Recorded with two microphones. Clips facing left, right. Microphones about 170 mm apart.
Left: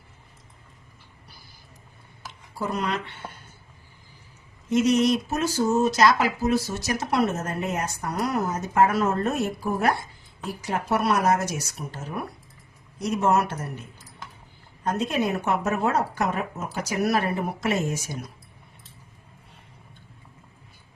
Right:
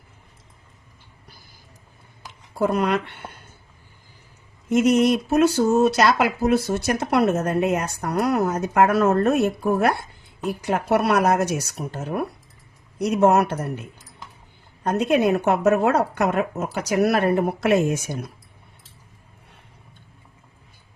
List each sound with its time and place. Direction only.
2.6 s speech: 60° right (ahead or behind)
4.7 s speech: 50° right (ahead or behind)
14.8 s speech: 65° right (ahead or behind)